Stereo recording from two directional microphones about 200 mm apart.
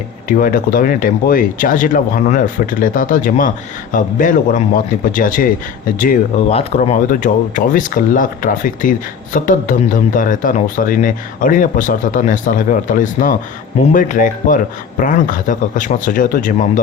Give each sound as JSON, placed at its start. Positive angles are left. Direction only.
{"t": 0.3, "sound": "speech", "side_deg": 45}
{"t": 6.6, "sound": "speech", "side_deg": 30}